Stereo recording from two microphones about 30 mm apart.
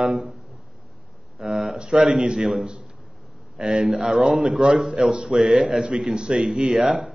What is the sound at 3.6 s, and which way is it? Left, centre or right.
Speech, right.